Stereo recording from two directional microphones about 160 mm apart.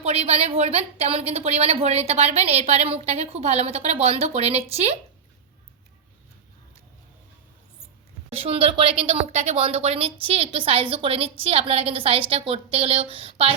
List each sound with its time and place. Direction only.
0.0 s a woman's voice: 40° right (ahead or behind)
8.3 s a woman's voice: 35° right (ahead or behind)